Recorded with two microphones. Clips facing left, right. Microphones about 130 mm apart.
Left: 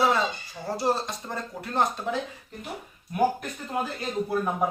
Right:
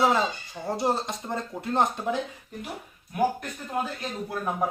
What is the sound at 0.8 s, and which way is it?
Speech, 20° right (ahead or behind).